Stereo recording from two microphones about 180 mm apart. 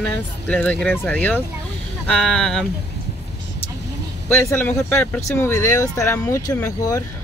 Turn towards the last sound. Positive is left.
turn(degrees=20)  # may be behind; listen again after turning